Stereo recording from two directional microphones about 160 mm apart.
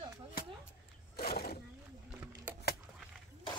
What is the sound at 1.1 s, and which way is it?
Speech, 80° left.